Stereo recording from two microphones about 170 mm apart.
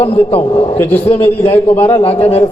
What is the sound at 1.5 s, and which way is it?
Speech, 10° left (ahead or behind).